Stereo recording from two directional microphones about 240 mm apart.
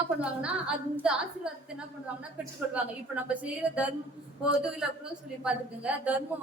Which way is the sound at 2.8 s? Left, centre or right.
Centre.